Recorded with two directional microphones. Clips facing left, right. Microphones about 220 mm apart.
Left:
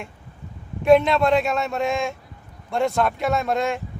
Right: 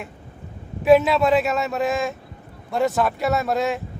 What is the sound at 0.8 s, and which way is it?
Speech, 5° right (ahead or behind).